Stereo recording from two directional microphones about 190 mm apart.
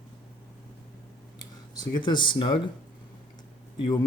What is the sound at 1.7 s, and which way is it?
Speech, 25° left (ahead or behind).